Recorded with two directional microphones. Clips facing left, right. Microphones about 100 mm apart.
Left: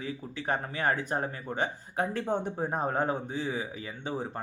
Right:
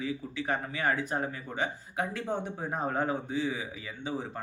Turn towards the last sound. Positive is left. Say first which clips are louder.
# even
turn(degrees=35)  # may be behind; listen again after turning